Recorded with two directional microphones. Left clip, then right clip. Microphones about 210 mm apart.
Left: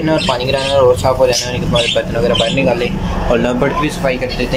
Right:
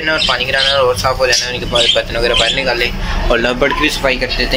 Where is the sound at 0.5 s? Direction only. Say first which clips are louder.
Left 3 dB; 15° left (ahead or behind).